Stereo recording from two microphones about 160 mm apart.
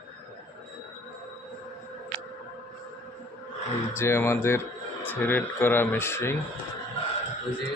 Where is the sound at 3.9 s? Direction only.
15° left (ahead or behind).